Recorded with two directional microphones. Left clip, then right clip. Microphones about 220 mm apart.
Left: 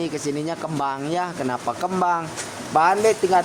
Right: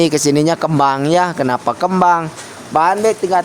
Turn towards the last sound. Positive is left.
turn(degrees=-40)  # may be behind; listen again after turning